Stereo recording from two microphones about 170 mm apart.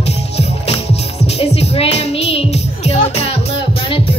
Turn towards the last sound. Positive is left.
turn(degrees=35)  # may be behind; listen again after turning